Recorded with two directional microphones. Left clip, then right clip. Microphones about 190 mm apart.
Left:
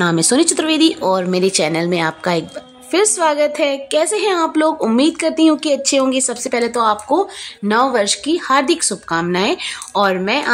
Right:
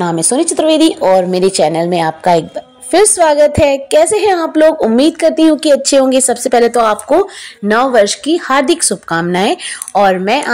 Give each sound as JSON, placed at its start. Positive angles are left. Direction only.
{"t": 0.0, "sound": "a woman's voice", "side_deg": 5}